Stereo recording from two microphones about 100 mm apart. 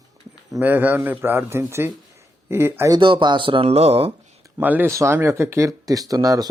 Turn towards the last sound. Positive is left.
turn(degrees=-35)  # may be behind; listen again after turning